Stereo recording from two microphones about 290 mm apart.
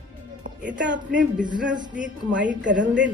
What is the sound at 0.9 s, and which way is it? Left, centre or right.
Speech, right.